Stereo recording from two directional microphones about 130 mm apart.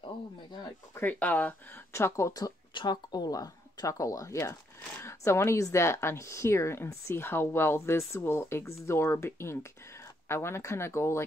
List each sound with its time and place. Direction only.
0.0 s speech: 35° left (ahead or behind)
0.9 s speech: 10° left (ahead or behind)